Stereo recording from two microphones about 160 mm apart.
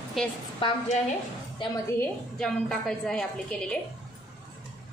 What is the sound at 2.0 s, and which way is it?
A woman's voice, 5° left (ahead or behind).